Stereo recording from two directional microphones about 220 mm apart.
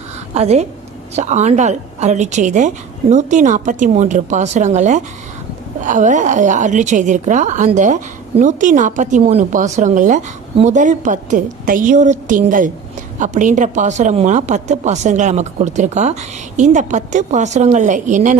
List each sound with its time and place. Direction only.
0.3 s a woman's voice: 30° right (ahead or behind)